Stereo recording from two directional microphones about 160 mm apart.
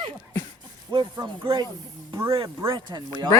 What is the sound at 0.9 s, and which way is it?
Speech, 25° right (ahead or behind).